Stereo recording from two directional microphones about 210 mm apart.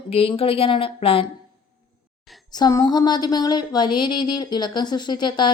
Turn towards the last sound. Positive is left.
turn(degrees=20)  # may be behind; listen again after turning